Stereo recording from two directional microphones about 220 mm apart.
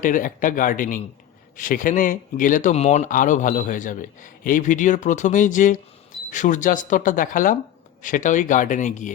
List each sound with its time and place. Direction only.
0.0 s speech: 35° left (ahead or behind)